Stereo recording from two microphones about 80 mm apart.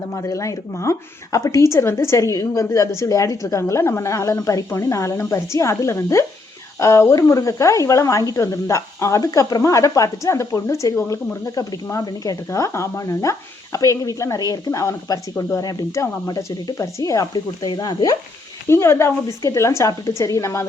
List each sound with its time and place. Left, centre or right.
0.1 s speech: left
12.0 s speech: left
12.5 s speech: left
18.7 s speech: left